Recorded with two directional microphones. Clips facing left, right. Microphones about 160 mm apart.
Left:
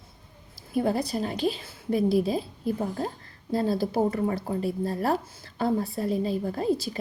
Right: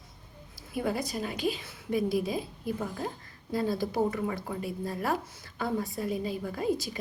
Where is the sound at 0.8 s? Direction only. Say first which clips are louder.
Left 5 dB; 35° left (ahead or behind).